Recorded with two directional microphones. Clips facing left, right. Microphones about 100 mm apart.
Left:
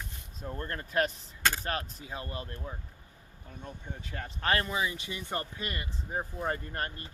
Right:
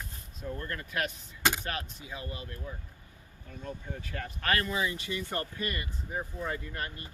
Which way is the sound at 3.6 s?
20° left (ahead or behind).